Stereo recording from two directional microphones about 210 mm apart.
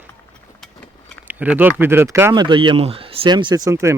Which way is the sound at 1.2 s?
10° right (ahead or behind).